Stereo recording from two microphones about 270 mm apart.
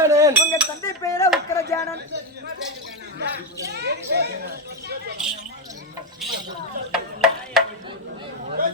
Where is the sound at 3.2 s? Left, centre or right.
Right.